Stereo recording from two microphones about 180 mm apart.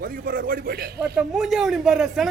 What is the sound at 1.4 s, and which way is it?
Speech, centre (ahead or behind).